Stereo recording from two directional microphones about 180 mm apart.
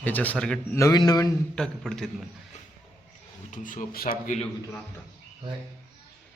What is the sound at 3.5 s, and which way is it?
Speech, 45° left (ahead or behind).